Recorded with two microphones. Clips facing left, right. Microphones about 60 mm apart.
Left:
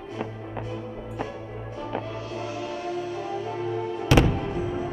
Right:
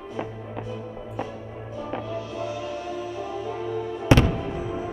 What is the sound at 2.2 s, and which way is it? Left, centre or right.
Music, left.